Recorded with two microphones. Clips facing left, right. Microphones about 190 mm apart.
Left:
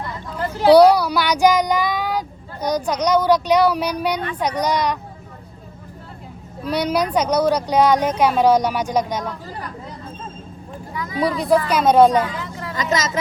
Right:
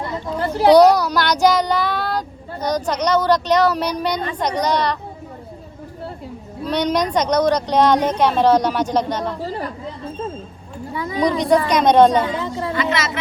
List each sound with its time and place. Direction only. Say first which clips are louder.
0.7 s a woman's voice: left 1 dB; 10° left (ahead or behind)
6.7 s a woman's voice: right 1 dB; 10° left (ahead or behind)
10.9 s a sound: right 3 dB; 30° right (ahead or behind)
11.3 s a woman's voice: right 1 dB; 5° left (ahead or behind)
12.3 s a sound: right 7 dB; 30° right (ahead or behind)
12.7 s speech: left 2 dB; 40° left (ahead or behind)